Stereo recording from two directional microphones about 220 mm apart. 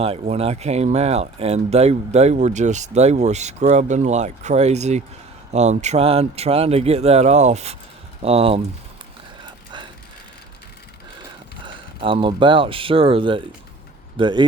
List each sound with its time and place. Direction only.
0.0 s speech: 25° right (ahead or behind)
11.6 s speech: 25° right (ahead or behind)